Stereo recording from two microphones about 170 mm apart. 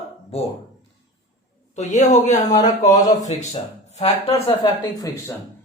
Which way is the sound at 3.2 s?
40° left (ahead or behind).